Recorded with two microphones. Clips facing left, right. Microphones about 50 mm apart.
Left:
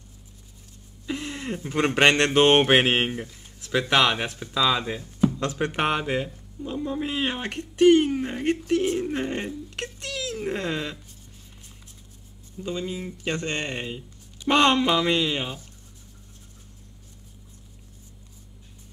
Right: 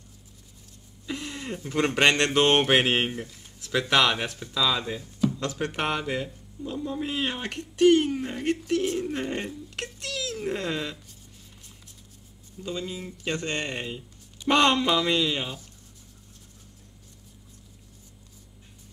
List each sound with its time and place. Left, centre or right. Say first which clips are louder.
1.0 s speech: left 3 dB; centre
12.6 s speech: left 3 dB; centre